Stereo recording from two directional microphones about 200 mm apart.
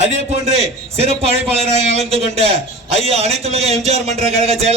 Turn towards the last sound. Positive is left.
turn(degrees=-30)  # may be behind; listen again after turning